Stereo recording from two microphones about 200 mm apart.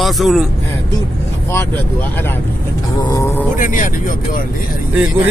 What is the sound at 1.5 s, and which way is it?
Speech, 10° left (ahead or behind).